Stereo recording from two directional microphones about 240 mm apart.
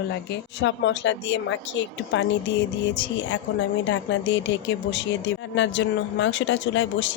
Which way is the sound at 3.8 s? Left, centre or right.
Left.